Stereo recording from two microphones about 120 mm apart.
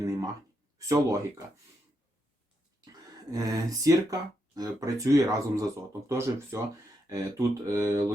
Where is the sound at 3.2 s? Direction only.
30° right (ahead or behind).